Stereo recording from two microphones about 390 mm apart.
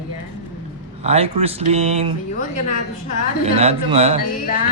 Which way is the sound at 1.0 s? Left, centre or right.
Centre.